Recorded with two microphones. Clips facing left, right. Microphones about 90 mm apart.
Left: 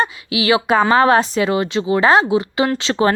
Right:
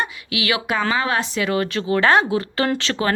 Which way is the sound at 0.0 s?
30° left (ahead or behind).